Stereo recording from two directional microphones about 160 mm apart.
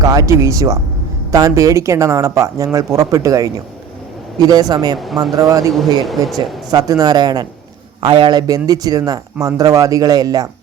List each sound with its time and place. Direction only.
0.0 s a man's voice: 20° right (ahead or behind)